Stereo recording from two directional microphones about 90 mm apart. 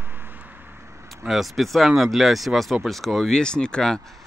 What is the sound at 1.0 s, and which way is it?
Speech, centre (ahead or behind).